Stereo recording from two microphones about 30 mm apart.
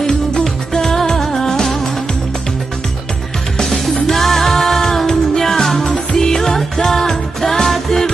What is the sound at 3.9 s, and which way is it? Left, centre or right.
Music, centre.